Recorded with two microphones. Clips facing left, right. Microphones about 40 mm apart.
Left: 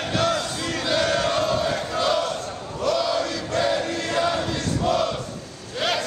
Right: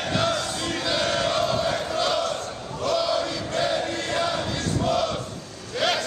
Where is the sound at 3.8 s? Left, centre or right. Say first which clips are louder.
Left 1 dB; right.